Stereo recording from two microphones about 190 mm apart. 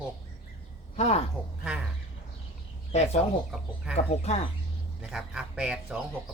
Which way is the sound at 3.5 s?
5° right (ahead or behind).